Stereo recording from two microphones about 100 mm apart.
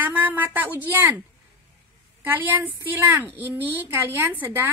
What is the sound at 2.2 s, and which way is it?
A woman's voice, 20° right (ahead or behind).